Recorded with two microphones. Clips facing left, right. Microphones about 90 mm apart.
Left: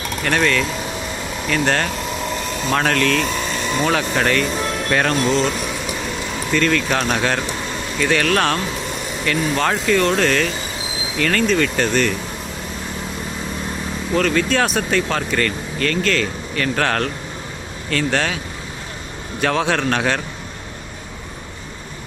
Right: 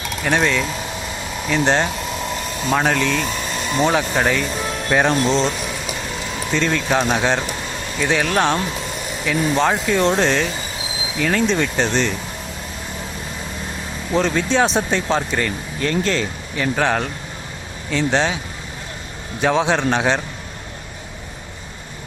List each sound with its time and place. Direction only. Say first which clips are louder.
0.2 s speech: even; 10° right (ahead or behind)
6.5 s speech: left 1 dB; 20° right (ahead or behind)
11.4 s speech: left 1 dB; 20° right (ahead or behind)
14.1 s speech: even; 20° right (ahead or behind)
19.4 s speech: right 1 dB; 15° right (ahead or behind)